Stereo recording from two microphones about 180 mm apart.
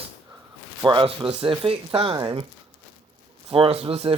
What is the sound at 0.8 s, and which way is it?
A man's voice, 25° right (ahead or behind).